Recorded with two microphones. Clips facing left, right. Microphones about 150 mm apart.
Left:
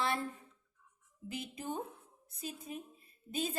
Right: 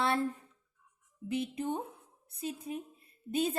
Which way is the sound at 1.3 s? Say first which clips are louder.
Right 7 dB; 60° right (ahead or behind).